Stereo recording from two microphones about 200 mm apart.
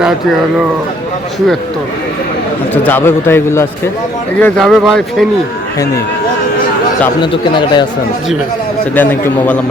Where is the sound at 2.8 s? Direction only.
10° left (ahead or behind).